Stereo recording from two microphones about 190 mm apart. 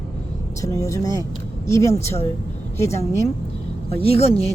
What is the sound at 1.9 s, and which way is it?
Speech, 35° left (ahead or behind).